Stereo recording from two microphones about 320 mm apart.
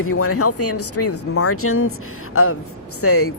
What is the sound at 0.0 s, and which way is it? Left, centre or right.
Speech, left.